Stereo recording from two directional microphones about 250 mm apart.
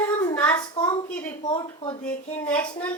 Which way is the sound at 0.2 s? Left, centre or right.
Centre.